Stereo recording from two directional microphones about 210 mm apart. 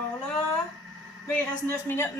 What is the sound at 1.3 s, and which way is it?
Speech, 10° left (ahead or behind).